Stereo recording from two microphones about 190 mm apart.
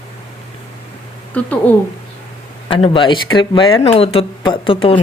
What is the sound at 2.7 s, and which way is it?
Speech, 30° left (ahead or behind).